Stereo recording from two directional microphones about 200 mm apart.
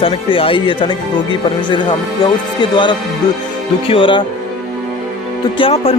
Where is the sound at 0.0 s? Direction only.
25° left (ahead or behind).